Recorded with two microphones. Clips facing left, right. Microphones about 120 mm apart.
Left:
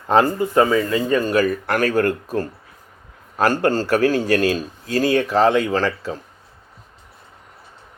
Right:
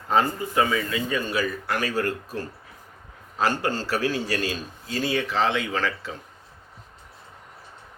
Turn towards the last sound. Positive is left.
turn(degrees=40)  # may be behind; listen again after turning